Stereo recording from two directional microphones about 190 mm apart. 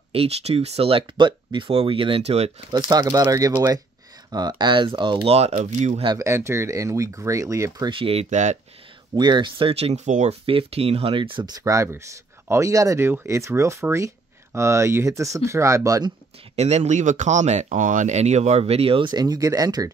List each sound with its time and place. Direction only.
0.1 s speech: 30° right (ahead or behind)
2.9 s speech: 20° right (ahead or behind); by 6.0 s 35° right (ahead or behind)
6.0 s speech: 15° right (ahead or behind)
7.9 s speech: 30° right (ahead or behind)
9.1 s speech: 25° right (ahead or behind)
16.5 s speech: 35° right (ahead or behind); by 19.9 s 20° right (ahead or behind)